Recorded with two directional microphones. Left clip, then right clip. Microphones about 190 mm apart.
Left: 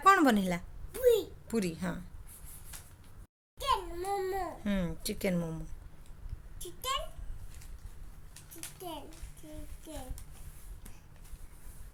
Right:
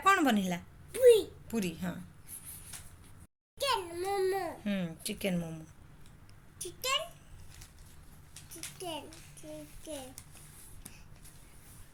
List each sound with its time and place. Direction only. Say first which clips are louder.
0.0 s a sound: left 3 dB; 30° left (ahead or behind)
0.9 s a sound: right 4 dB; 10° left (ahead or behind)
1.5 s speech: left 2 dB; 30° left (ahead or behind)
3.6 s crying: even; 5° left (ahead or behind)
4.6 s speech: left 2 dB; 35° left (ahead or behind)
6.6 s a child's voice: right 2 dB; 10° left (ahead or behind)
8.8 s a child's voice: right 3 dB; 10° left (ahead or behind)